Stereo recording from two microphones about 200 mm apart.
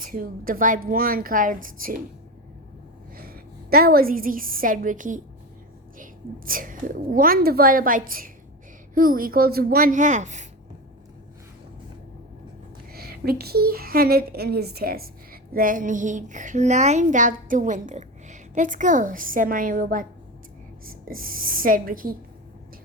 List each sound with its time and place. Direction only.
0.0 s a woman's voice: 45° right (ahead or behind)
3.2 s a woman's voice: 50° right (ahead or behind)
12.9 s a woman's voice: 50° right (ahead or behind)